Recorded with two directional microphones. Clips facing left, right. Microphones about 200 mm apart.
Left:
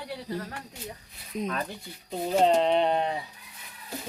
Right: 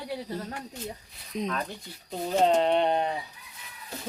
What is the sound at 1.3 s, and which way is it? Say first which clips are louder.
Speech: even; 5° left (ahead or behind).